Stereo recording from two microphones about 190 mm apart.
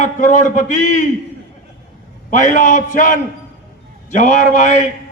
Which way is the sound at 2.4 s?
40° left (ahead or behind).